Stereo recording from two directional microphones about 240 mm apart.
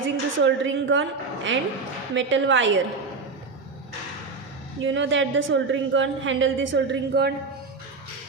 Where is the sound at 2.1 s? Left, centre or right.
Right.